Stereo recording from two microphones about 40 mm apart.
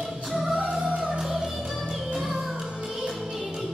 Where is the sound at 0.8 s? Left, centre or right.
Right.